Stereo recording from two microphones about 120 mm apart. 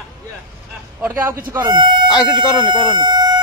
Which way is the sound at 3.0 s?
35° right (ahead or behind).